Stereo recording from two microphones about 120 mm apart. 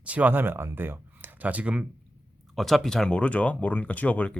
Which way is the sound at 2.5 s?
Centre (ahead or behind).